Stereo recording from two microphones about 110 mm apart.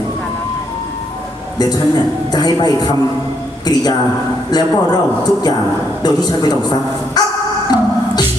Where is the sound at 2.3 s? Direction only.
40° left (ahead or behind).